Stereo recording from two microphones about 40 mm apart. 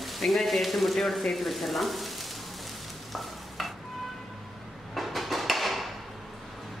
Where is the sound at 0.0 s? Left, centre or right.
Centre.